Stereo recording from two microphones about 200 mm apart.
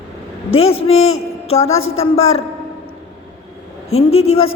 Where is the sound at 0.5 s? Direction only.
30° left (ahead or behind).